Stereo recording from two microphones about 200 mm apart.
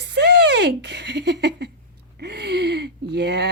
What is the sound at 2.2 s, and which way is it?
Gasp, 55° right (ahead or behind).